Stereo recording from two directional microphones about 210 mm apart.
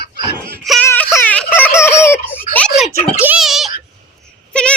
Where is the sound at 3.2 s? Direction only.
5° right (ahead or behind).